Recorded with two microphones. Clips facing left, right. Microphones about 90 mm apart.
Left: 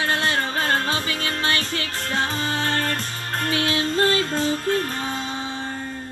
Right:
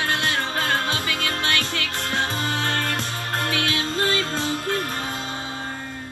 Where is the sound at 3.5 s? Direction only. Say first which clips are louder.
Left 6 dB; 30° left (ahead or behind).